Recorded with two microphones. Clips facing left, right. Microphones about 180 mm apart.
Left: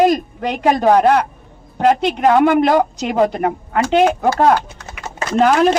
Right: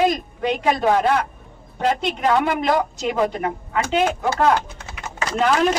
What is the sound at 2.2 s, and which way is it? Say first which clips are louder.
Speech: left 8 dB; 50° left (ahead or behind).